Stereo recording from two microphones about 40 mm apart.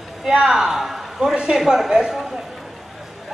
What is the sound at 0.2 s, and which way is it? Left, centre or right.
A man's voice, centre.